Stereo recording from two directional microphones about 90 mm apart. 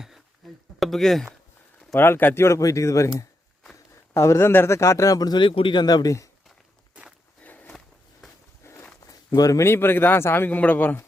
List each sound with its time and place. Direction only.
0.8 s speech: 5° left (ahead or behind)
1.9 s speech: 25° left (ahead or behind)
4.1 s speech: 30° left (ahead or behind)
5.4 s speech: 80° left; by 6.2 s 40° left (ahead or behind)
7.4 s walk: 20° left (ahead or behind)
8.6 s a sound: 30° left (ahead or behind)
9.0 s speech: 40° left (ahead or behind); by 11.0 s 20° left (ahead or behind)